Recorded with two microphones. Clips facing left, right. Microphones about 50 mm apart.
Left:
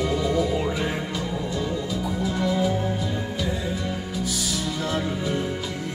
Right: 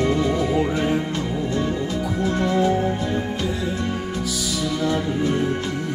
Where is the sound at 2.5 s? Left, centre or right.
Right.